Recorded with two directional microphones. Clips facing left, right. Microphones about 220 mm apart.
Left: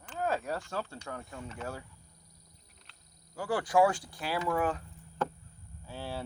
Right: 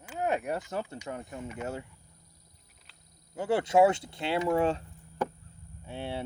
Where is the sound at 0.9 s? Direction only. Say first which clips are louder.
Right 4 dB; 20° right (ahead or behind).